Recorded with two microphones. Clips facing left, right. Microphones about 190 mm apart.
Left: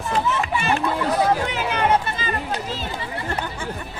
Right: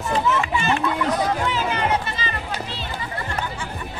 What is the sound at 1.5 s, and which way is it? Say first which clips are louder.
Run: left 2 dB; 55° left (ahead or behind).